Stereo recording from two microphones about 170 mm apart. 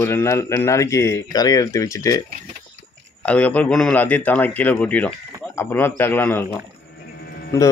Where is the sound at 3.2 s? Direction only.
10° left (ahead or behind).